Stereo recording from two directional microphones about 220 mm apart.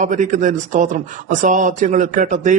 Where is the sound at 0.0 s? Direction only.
35° right (ahead or behind).